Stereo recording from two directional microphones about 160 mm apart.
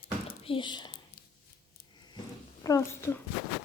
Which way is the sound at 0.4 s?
30° left (ahead or behind).